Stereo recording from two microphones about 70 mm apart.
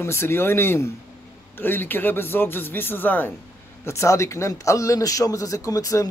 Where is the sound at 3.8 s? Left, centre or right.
Left.